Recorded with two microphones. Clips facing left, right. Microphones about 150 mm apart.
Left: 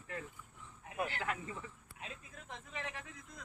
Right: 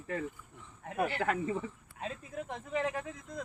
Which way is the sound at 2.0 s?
60° right (ahead or behind).